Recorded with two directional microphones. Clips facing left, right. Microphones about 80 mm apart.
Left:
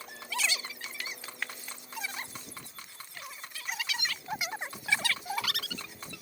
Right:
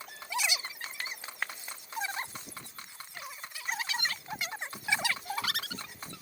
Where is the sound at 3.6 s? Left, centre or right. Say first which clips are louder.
Right 2 dB; right.